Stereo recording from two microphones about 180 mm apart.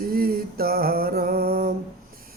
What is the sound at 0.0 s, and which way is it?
Music, 55° right (ahead or behind).